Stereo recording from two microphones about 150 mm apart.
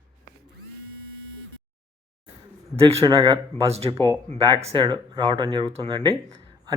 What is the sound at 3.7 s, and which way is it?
Speech, 40° right (ahead or behind).